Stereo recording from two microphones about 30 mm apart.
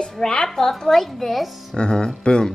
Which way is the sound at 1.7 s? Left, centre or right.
Left.